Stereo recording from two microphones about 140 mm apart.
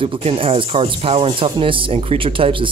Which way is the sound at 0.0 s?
40° right (ahead or behind).